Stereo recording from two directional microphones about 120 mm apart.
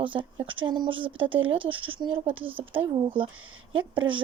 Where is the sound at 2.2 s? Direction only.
15° right (ahead or behind).